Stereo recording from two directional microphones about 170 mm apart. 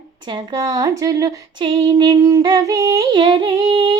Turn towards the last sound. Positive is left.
turn(degrees=-25)  # may be behind; listen again after turning